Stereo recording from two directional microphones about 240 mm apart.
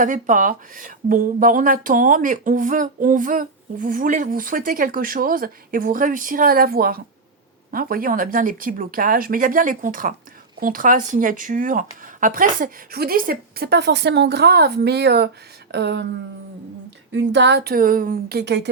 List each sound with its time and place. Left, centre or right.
0.0 s speech: right
17.1 s speech: right